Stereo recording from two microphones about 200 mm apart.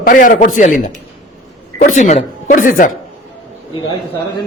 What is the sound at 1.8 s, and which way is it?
Speech, 40° left (ahead or behind).